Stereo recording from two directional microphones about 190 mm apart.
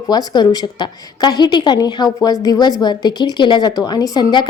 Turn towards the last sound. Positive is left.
turn(degrees=20)  # may be behind; listen again after turning